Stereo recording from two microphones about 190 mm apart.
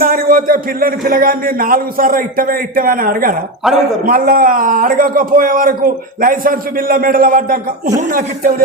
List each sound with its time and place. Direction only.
0.0 s a man's voice: 50° right (ahead or behind)
3.6 s a man's voice: centre (ahead or behind)
4.0 s a man's voice: 45° right (ahead or behind)